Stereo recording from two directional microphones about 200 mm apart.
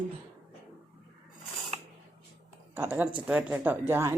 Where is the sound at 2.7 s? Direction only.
10° right (ahead or behind).